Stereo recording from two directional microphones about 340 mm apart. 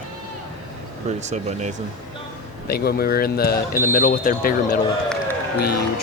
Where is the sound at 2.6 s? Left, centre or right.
Left.